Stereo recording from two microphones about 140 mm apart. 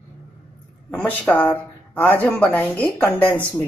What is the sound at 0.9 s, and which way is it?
Speech, 10° left (ahead or behind).